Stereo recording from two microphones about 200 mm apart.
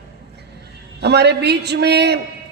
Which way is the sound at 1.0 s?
55° right (ahead or behind).